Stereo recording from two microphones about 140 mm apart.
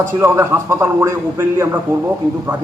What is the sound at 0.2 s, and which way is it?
A man's voice, 20° right (ahead or behind).